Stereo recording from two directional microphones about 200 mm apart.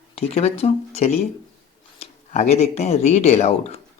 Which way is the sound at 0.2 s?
30° left (ahead or behind).